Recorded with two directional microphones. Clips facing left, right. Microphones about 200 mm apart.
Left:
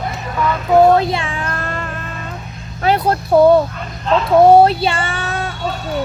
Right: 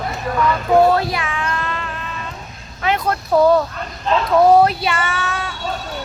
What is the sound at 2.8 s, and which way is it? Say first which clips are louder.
Vehicle: left 4 dB; 35° left (ahead or behind).